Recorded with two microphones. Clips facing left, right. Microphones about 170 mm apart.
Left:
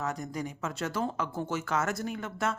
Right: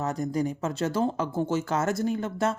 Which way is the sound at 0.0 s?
30° right (ahead or behind).